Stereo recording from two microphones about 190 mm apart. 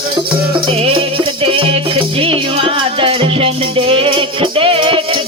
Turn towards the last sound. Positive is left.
turn(degrees=-25)  # may be behind; listen again after turning